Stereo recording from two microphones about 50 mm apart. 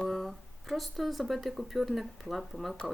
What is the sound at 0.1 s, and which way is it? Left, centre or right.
Speech, centre.